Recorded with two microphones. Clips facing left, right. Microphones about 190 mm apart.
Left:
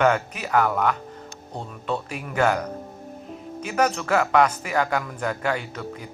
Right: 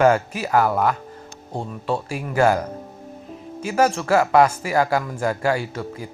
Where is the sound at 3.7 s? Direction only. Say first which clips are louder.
Right 4 dB; 30° right (ahead or behind).